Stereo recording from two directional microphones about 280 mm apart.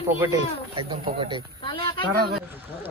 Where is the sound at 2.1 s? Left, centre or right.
Right.